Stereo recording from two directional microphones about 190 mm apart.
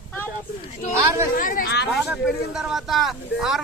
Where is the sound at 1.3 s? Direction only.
45° left (ahead or behind).